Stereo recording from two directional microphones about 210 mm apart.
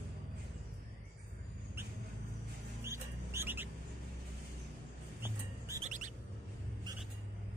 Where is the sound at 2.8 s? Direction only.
10° right (ahead or behind).